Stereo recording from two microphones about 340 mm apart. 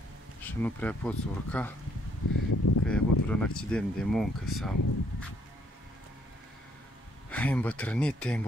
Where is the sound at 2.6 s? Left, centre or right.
Left.